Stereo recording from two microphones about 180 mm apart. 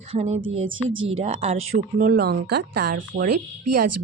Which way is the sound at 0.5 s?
90° right.